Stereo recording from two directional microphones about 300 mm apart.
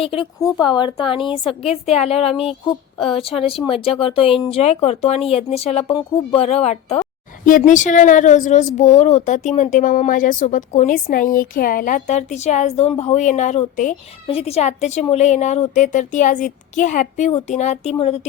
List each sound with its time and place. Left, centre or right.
0.0 s a woman's voice: centre